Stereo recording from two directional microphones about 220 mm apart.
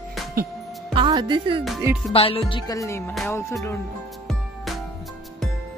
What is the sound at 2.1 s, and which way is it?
Speech, 25° left (ahead or behind).